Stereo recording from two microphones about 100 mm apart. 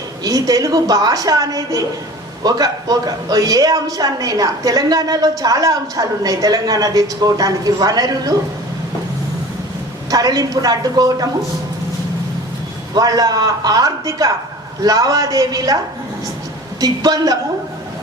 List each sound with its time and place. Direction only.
0.3 s a woman's voice: 40° right (ahead or behind)
10.1 s a woman's voice: 40° right (ahead or behind)
12.9 s a woman's voice: 40° right (ahead or behind)
16.8 s a woman's voice: 40° right (ahead or behind)